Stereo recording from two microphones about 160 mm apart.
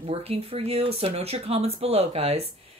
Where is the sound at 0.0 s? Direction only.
40° right (ahead or behind).